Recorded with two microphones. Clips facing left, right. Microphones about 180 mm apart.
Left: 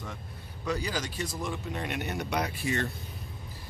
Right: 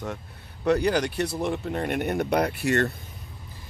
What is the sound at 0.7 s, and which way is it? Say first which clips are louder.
Speech: right 10 dB; 65° right (ahead or behind).